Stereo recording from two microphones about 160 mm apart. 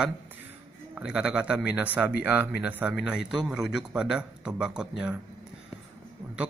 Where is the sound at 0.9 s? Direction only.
5° right (ahead or behind).